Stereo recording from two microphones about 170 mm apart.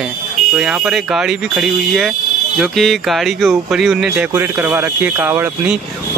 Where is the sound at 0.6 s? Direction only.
Centre (ahead or behind).